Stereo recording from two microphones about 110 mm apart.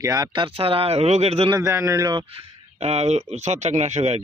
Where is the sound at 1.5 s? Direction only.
30° right (ahead or behind).